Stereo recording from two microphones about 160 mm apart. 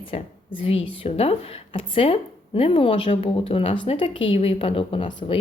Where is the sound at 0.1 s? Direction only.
40° left (ahead or behind).